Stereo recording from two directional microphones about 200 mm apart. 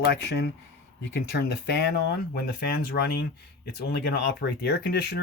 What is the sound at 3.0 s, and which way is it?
Speech, 55° left (ahead or behind).